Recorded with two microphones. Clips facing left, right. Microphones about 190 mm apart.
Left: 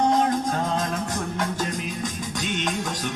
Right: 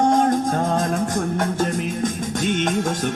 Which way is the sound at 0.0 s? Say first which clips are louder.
Right 4 dB; 50° right (ahead or behind).